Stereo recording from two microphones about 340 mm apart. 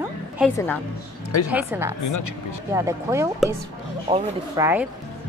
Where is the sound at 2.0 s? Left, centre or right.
Left.